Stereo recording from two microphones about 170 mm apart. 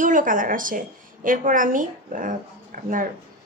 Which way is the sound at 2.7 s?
55° right (ahead or behind).